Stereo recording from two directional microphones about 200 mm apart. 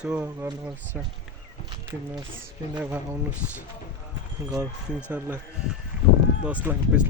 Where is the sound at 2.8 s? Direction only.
10° right (ahead or behind).